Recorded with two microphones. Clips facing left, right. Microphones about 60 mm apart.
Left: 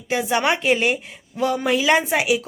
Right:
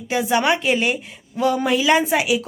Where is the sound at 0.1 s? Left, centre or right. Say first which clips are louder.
Right 2 dB; left.